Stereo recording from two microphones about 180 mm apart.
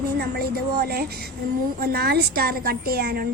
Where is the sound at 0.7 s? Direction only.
60° right (ahead or behind).